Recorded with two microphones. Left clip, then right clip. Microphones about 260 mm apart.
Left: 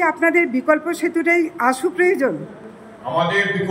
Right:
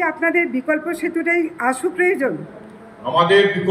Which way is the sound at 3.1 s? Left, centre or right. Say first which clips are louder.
Right 4 dB; right.